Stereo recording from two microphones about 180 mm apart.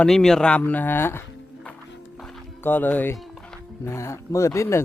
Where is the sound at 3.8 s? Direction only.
15° left (ahead or behind).